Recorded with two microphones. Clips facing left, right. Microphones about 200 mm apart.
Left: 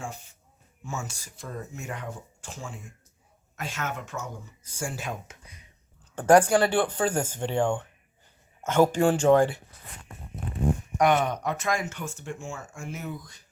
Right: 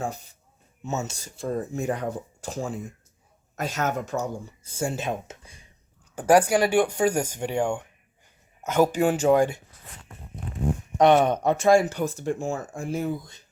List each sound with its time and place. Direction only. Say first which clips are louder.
0.0 s speech: right 7 dB; 35° right (ahead or behind)
0.9 s speech: right 6 dB; 25° right (ahead or behind)
6.1 s speech: even; 10° right (ahead or behind)
10.9 s speech: right 6 dB; 25° right (ahead or behind)